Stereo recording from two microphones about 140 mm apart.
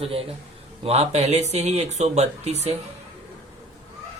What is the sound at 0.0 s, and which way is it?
Speech, 45° right (ahead or behind).